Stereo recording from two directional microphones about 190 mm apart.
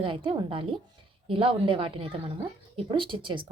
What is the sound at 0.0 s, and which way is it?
A woman's voice, 25° right (ahead or behind).